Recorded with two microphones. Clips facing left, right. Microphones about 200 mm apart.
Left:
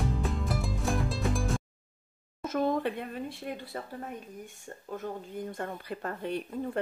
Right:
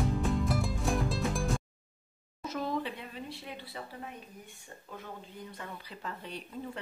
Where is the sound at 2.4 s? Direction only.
50° left (ahead or behind).